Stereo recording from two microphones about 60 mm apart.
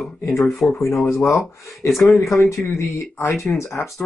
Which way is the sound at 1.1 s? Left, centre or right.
Left.